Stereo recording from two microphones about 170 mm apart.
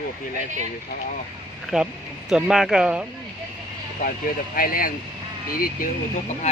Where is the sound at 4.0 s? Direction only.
55° left (ahead or behind).